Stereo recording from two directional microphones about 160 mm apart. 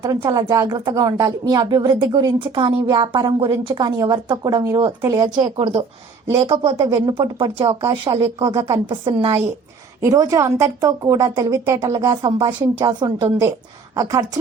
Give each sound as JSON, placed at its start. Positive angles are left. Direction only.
{"t": 0.0, "sound": "speech", "side_deg": -25}
{"t": 5.5, "sound": "a woman's voice", "side_deg": -40}
{"t": 6.2, "sound": "a woman's voice", "side_deg": -30}
{"t": 10.0, "sound": "speech", "side_deg": -20}